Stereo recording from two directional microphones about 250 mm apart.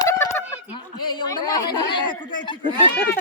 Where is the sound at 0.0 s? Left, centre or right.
Centre.